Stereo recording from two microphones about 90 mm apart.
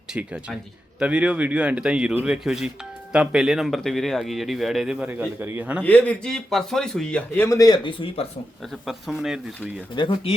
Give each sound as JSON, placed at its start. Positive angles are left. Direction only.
{"t": 0.2, "sound": "speech", "side_deg": -15}
{"t": 5.4, "sound": "a man's voice", "side_deg": -20}
{"t": 5.8, "sound": "speech", "side_deg": 20}
{"t": 7.3, "sound": "speech", "side_deg": 30}
{"t": 7.9, "sound": "speech", "side_deg": 80}
{"t": 8.9, "sound": "speech", "side_deg": -5}
{"t": 9.9, "sound": "speech", "side_deg": 65}